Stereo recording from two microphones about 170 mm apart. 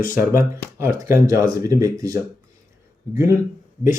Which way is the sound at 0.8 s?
15° right (ahead or behind).